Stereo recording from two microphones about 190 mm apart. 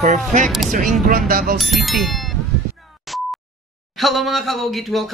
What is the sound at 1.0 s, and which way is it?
Speech, 50° right (ahead or behind).